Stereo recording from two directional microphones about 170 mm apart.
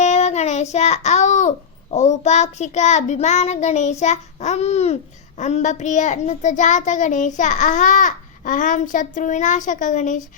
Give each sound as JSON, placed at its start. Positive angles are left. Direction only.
{"t": 0.0, "sound": "child singing", "side_deg": 40}